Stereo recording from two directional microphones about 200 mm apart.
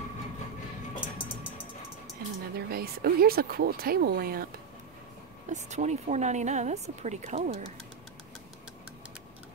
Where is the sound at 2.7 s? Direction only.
50° right (ahead or behind).